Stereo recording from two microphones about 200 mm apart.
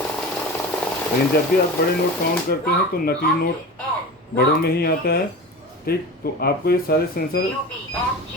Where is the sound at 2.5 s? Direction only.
50° left (ahead or behind).